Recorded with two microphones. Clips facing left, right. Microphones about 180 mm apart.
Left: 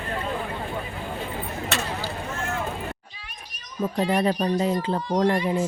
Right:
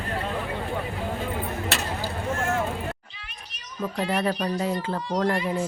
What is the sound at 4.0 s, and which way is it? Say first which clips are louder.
Speech: left 3 dB; 20° left (ahead or behind).